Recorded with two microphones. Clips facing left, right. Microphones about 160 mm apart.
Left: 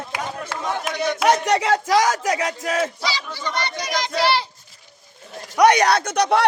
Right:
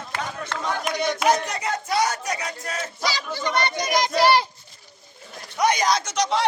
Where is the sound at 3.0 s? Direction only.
45° right (ahead or behind).